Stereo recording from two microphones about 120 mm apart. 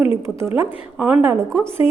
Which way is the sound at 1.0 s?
10° right (ahead or behind).